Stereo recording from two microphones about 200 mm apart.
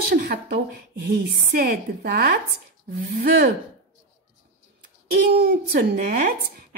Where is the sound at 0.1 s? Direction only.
45° right (ahead or behind).